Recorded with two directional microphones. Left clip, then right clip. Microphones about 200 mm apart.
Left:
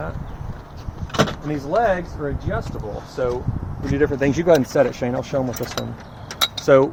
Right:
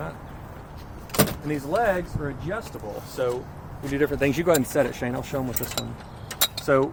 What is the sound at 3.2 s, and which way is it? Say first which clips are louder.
Speech: left 3 dB; 40° left (ahead or behind).